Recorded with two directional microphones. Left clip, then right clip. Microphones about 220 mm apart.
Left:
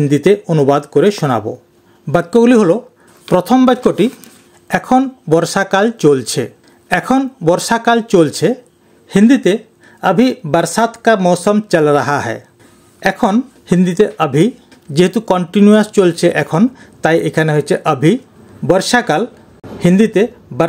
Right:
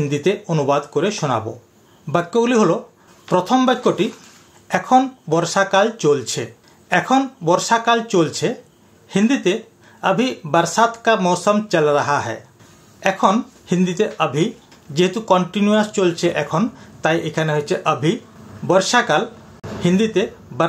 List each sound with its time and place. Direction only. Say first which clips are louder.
0.0 s speech: left 8 dB; 45° left (ahead or behind)